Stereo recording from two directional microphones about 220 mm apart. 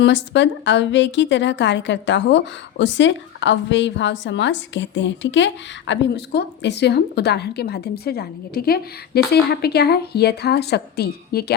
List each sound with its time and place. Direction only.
0.0 s a woman's voice: 55° left (ahead or behind)